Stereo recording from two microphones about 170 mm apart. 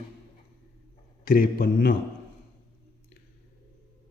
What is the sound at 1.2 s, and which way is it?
Speech, 60° left (ahead or behind).